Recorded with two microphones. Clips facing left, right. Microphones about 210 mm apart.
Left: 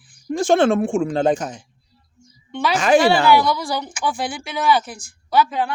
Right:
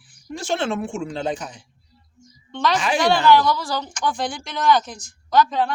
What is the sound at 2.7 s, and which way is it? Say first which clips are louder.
Speech: left 9 dB; 45° left (ahead or behind).